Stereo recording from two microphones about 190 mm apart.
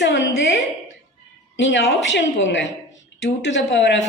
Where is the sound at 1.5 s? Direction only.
70° left (ahead or behind).